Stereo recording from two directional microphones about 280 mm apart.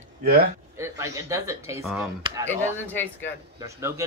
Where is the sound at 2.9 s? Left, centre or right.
Centre.